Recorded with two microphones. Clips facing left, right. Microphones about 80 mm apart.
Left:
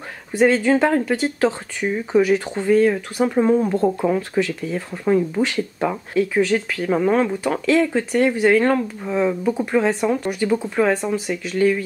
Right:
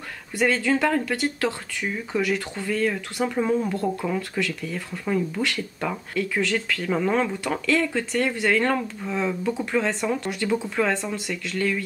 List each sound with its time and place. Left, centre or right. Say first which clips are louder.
0.7 s speech: left 5 dB; left